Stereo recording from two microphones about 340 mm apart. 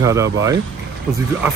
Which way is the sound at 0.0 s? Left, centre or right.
Centre.